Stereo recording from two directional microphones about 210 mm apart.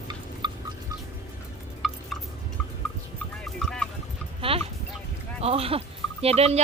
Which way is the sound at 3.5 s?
5° left (ahead or behind).